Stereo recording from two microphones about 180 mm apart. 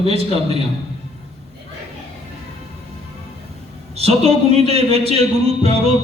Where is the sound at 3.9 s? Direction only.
35° right (ahead or behind).